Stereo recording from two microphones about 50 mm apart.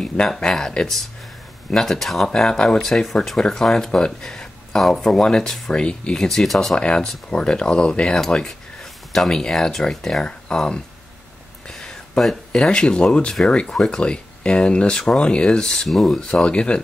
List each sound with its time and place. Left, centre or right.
0.4 s speech: centre
6.1 s speech: centre
6.7 s speech: centre
9.3 s speech: centre
11.6 s a sound: centre
12.2 s speech: centre
15.9 s speech: centre
16.4 s speech: left